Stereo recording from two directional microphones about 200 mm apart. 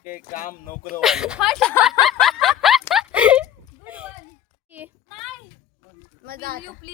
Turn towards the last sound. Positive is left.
turn(degrees=-45)  # may be behind; listen again after turning